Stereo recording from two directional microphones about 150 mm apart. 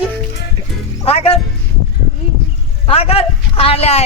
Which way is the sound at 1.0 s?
40° left (ahead or behind).